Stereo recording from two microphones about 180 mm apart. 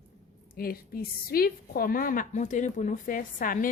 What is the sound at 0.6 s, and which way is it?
A woman's voice, 55° left (ahead or behind).